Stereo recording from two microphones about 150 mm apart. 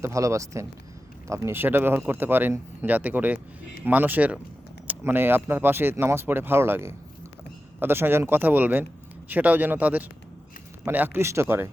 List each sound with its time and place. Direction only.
0.0 s speech: 20° right (ahead or behind)